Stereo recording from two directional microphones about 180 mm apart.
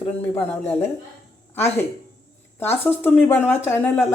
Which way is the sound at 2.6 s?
10° left (ahead or behind).